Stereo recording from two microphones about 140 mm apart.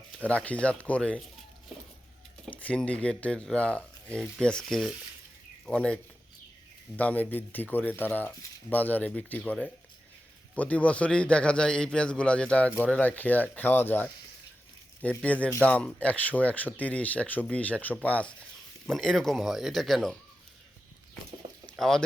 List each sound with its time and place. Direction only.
0.3 s a man's voice: 10° left (ahead or behind)
2.5 s a man's voice: 10° left (ahead or behind)
21.4 s a sound: 40° right (ahead or behind)
21.8 s speech: 5° left (ahead or behind)